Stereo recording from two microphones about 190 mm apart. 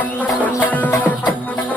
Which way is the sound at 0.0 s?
10° left (ahead or behind).